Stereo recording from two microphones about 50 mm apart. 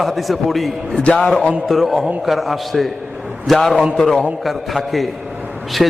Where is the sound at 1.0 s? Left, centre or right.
Centre.